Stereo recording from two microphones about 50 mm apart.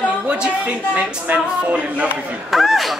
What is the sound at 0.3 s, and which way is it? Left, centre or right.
Speech, right.